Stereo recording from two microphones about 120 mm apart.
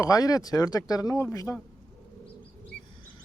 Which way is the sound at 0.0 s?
30° left (ahead or behind).